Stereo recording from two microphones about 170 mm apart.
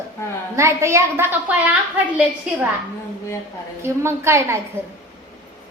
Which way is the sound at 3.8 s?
15° right (ahead or behind).